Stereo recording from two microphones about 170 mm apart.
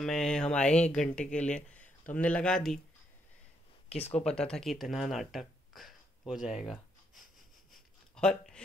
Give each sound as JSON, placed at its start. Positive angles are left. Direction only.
{"t": 0.0, "sound": "speech", "side_deg": 5}
{"t": 3.9, "sound": "speech", "side_deg": 35}
{"t": 4.4, "sound": "speech", "side_deg": 5}
{"t": 7.7, "sound": "a sound", "side_deg": 5}